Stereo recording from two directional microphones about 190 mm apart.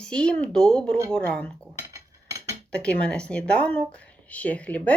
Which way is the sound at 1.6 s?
15° right (ahead or behind).